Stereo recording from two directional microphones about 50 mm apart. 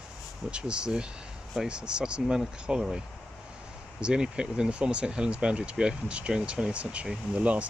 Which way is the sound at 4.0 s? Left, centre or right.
Centre.